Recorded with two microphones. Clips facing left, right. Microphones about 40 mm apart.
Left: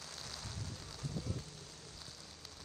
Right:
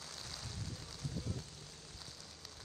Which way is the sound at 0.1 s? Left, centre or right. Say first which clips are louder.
Left 1 dB; left.